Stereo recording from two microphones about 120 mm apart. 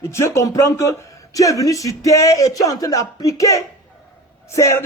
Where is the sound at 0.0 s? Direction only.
25° left (ahead or behind).